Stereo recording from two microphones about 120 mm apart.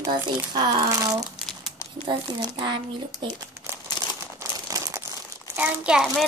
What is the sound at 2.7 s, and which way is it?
Speech, 45° right (ahead or behind).